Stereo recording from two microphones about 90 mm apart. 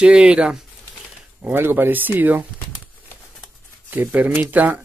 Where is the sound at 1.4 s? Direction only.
25° right (ahead or behind).